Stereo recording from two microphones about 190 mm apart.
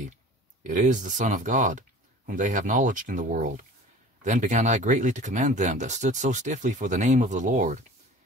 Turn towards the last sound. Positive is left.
turn(degrees=-40)  # may be behind; listen again after turning